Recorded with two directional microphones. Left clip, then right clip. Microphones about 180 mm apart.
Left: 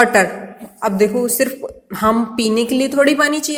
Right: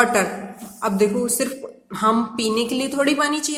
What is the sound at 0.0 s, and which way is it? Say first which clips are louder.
A woman's voice: left 6 dB; 25° left (ahead or behind).